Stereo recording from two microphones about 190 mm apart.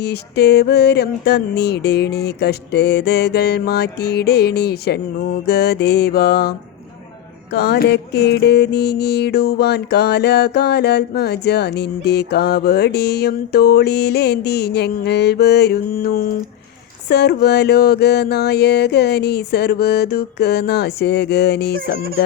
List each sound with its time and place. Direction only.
0.0 s music: 60° left (ahead or behind)